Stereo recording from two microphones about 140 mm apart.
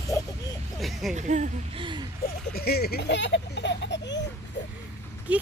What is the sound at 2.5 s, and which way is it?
Speech, 90° left.